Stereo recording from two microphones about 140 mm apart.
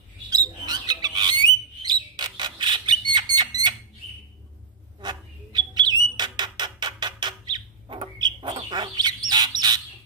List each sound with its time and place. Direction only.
0.3 s bird: 30° right (ahead or behind)
5.0 s bird: 30° right (ahead or behind)
6.1 s a sound: 30° right (ahead or behind)
8.2 s bird: 30° right (ahead or behind)